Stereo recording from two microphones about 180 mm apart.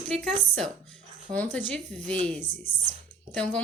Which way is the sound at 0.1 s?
5° left (ahead or behind).